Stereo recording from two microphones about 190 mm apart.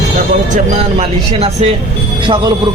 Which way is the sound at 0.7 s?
30° right (ahead or behind).